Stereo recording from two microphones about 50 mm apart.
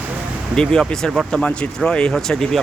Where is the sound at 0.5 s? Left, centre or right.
Centre.